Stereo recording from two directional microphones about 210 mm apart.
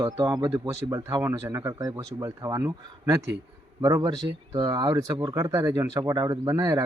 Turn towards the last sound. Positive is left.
turn(degrees=-15)  # may be behind; listen again after turning